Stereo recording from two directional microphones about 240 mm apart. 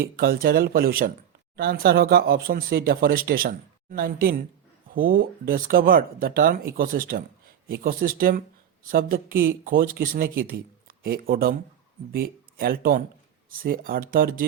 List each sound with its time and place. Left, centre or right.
0.0 s speech: right